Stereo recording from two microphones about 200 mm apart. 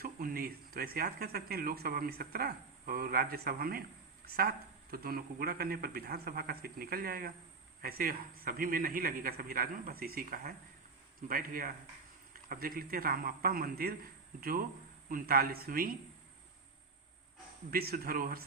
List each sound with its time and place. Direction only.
0.0 s speech: 45° right (ahead or behind)
15.1 s speech: 45° right (ahead or behind)
17.7 s speech: 50° right (ahead or behind)